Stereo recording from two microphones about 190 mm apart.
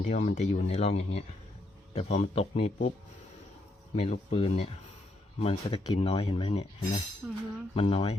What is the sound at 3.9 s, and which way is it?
Speech, 35° left (ahead or behind).